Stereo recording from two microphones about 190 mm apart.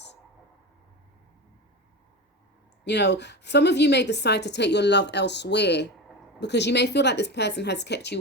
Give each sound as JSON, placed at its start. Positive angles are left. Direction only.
{"t": 2.8, "sound": "a woman's voice", "side_deg": 65}